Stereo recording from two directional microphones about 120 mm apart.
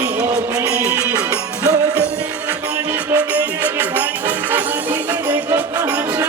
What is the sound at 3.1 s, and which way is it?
Music, 10° right (ahead or behind).